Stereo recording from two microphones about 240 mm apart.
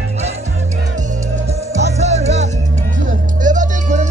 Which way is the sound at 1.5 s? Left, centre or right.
Right.